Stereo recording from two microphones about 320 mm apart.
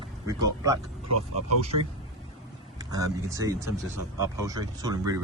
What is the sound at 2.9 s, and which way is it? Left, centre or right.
Speech, centre.